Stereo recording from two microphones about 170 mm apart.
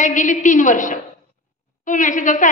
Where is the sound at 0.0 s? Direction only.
50° left (ahead or behind).